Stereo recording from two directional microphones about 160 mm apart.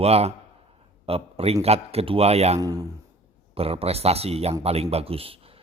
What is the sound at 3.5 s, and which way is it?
Speech, 40° right (ahead or behind).